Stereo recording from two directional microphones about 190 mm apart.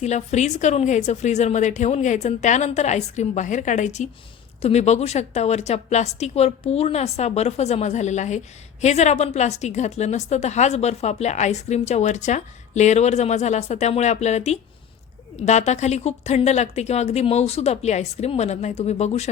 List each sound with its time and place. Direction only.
0.0 s a woman's voice: 35° left (ahead or behind)